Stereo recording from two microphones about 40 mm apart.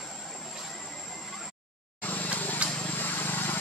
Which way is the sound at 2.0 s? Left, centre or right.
Left.